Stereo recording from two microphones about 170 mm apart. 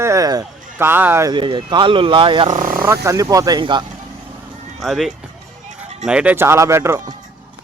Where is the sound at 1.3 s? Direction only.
30° right (ahead or behind).